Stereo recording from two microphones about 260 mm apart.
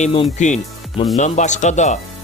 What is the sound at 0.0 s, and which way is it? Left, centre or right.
Speech, left.